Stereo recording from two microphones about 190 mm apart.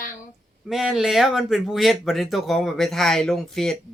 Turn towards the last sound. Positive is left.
turn(degrees=0)  # may be behind; listen again after turning